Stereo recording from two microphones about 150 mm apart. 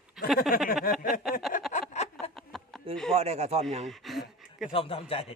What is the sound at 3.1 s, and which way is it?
Speech, 45° right (ahead or behind).